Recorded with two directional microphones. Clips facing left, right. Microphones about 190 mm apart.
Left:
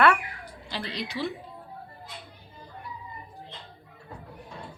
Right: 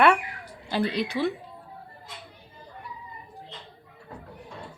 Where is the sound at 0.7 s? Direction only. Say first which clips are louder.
Right 8 dB; 55° right (ahead or behind).